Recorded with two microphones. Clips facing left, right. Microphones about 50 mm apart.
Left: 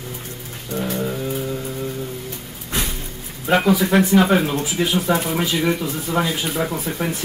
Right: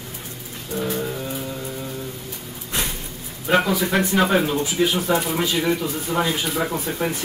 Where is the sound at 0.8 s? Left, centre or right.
Centre.